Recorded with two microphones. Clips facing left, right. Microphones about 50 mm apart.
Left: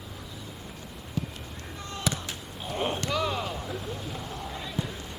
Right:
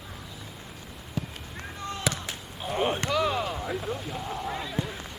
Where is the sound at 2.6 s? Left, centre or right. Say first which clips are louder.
Right 3 dB; centre.